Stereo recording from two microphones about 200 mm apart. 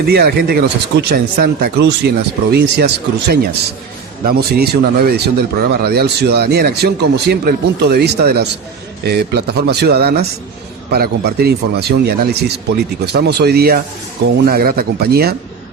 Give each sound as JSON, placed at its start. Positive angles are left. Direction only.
{"t": 0.0, "sound": "a man's voice", "side_deg": -50}